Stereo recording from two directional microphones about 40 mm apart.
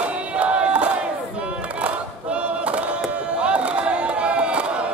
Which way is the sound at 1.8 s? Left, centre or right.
Right.